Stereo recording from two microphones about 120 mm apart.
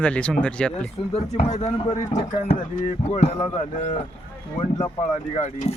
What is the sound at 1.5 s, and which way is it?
Speech, 70° left (ahead or behind).